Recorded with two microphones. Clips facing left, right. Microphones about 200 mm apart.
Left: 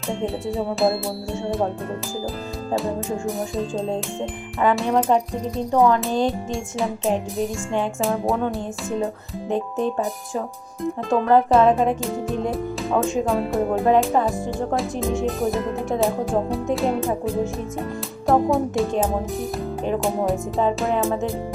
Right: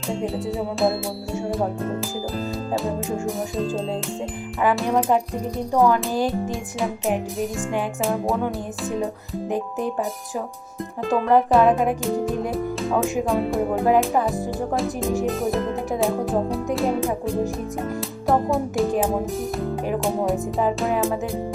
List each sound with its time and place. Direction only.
0.5 s speech: centre (ahead or behind)
3.3 s speech: centre (ahead or behind)
9.5 s speech: 25° left (ahead or behind)
11.1 s speech: centre (ahead or behind)